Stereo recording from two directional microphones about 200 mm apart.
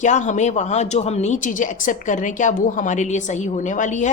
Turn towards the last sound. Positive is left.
turn(degrees=40)  # may be behind; listen again after turning